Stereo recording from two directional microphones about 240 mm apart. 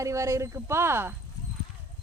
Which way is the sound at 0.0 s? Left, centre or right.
Centre.